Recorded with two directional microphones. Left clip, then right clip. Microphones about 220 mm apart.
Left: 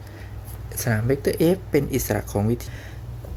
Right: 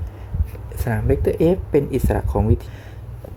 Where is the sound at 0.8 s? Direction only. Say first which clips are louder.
Right 2 dB; 10° right (ahead or behind).